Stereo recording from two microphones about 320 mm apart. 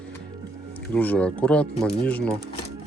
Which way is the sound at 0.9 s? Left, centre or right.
Centre.